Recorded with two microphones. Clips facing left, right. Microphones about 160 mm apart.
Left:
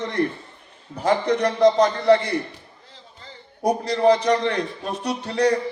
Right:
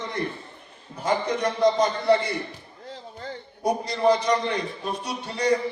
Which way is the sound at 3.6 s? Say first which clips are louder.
Left 3 dB; 65° left (ahead or behind).